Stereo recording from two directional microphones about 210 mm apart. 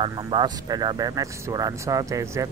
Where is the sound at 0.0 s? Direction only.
25° right (ahead or behind).